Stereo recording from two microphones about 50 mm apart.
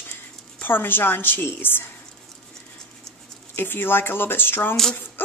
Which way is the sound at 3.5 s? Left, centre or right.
Left.